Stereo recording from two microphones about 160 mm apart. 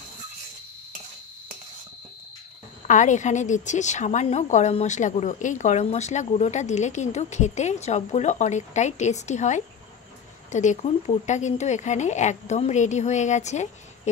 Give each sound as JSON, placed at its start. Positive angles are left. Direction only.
{"t": 2.9, "sound": "a woman's voice", "side_deg": 50}